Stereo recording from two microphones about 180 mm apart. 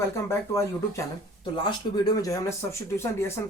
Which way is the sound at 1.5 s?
25° left (ahead or behind).